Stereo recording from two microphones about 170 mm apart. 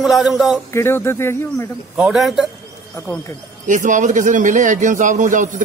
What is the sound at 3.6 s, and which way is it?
A man's voice, 45° right (ahead or behind).